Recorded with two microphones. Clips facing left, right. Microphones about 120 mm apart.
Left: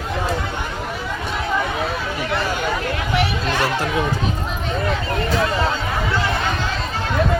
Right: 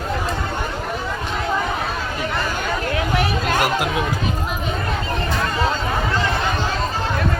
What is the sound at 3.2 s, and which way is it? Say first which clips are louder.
Chatter: right 1 dB; 45° right (ahead or behind).